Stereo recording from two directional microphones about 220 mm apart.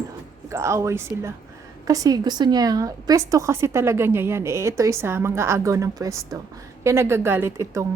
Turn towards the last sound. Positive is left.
turn(degrees=-15)  # may be behind; listen again after turning